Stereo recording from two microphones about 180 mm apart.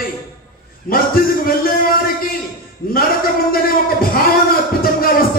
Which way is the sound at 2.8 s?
55° left (ahead or behind).